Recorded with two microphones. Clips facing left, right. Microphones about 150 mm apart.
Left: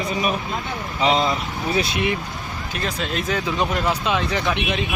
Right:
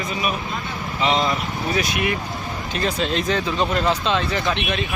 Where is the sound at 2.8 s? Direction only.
Centre (ahead or behind).